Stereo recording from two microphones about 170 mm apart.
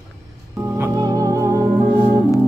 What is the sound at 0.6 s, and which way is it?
Music, 15° right (ahead or behind).